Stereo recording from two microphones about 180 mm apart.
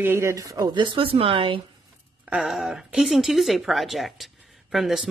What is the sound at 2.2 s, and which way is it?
A woman's voice, 5° right (ahead or behind).